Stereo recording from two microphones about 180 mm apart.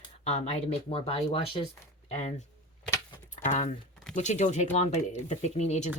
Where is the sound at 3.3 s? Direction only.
40° left (ahead or behind).